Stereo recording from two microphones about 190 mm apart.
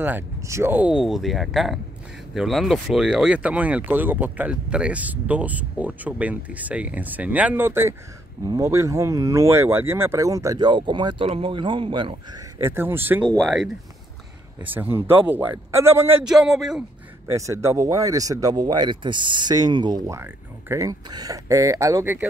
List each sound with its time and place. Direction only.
0.0 s speech: 10° right (ahead or behind)
12.6 s speech: 10° right (ahead or behind)
16.3 s speech: centre (ahead or behind)
17.3 s speech: 15° right (ahead or behind)